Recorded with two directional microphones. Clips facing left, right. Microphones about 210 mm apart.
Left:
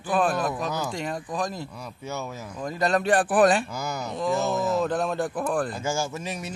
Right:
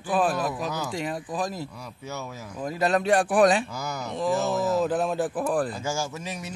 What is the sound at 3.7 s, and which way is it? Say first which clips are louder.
Speech: left 1 dB; 25° left (ahead or behind).